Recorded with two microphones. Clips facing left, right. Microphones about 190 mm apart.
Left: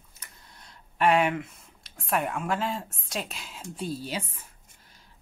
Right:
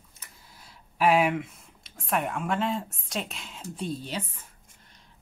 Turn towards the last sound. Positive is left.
turn(degrees=5)  # may be behind; listen again after turning